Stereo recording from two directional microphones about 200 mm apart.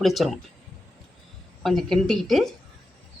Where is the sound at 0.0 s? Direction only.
Centre (ahead or behind).